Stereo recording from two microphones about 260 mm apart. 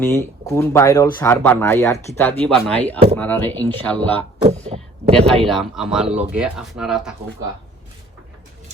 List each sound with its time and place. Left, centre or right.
0.0 s speech: centre
4.4 s a sound: right
5.1 s speech: centre